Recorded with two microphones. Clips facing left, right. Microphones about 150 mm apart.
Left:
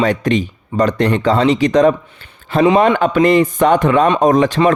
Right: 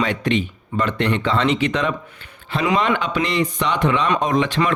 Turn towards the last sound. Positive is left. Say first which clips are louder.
# left 7 dB
turn(degrees=45)  # may be behind; listen again after turning